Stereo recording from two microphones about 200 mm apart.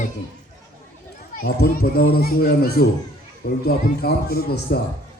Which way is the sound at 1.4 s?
50° left (ahead or behind).